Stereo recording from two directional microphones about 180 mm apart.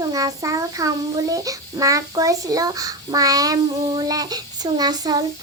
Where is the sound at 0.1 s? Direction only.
20° right (ahead or behind).